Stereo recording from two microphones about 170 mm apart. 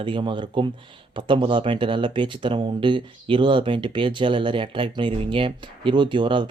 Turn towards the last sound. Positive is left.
turn(degrees=-30)  # may be behind; listen again after turning